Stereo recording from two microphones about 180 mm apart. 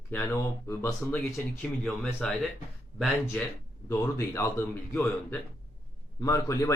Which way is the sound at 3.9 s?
15° left (ahead or behind).